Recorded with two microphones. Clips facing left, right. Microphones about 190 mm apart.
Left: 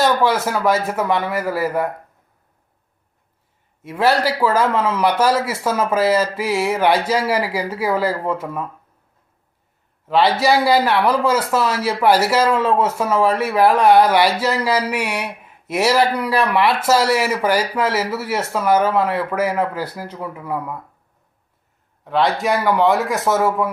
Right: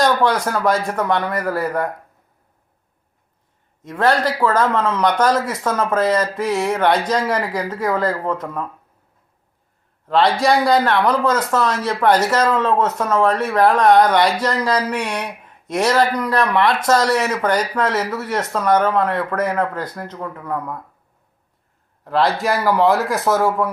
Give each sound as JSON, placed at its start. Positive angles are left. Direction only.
{"t": 0.0, "sound": "a man's voice", "side_deg": 5}
{"t": 3.8, "sound": "speech", "side_deg": 10}
{"t": 10.1, "sound": "speech", "side_deg": 5}
{"t": 22.0, "sound": "a man's voice", "side_deg": 0}